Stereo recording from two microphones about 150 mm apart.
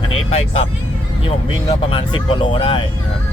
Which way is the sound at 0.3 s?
45° left (ahead or behind).